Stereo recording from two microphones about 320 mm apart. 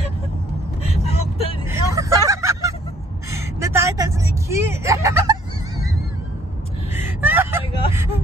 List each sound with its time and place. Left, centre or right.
1.0 s vehicle: centre
1.7 s vehicle: centre
7.0 s vehicle: centre